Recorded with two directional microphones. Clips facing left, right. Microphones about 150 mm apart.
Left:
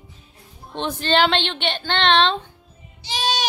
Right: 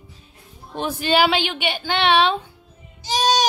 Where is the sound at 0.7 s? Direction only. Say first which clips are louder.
Right 1 dB; 10° right (ahead or behind).